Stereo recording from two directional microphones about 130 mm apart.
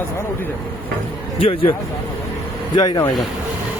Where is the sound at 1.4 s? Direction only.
45° left (ahead or behind).